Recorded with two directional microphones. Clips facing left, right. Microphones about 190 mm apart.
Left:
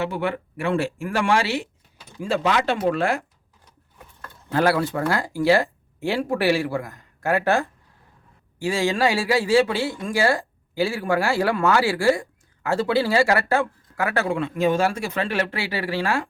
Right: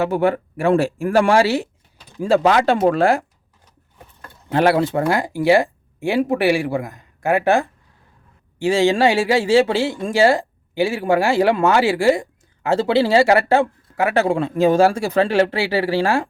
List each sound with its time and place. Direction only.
0.0 s speech: 40° right (ahead or behind)
4.2 s speech: 20° right (ahead or behind)